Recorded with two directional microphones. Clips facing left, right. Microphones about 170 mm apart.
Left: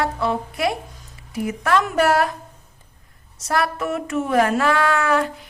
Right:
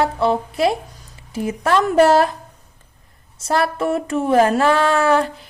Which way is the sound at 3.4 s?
30° right (ahead or behind).